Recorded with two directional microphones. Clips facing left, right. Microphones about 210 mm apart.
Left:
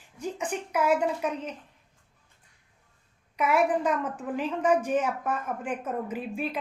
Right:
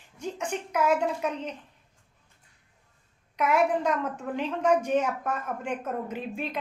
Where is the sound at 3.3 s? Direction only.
5° left (ahead or behind).